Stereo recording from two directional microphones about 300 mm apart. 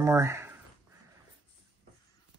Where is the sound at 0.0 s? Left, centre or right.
Centre.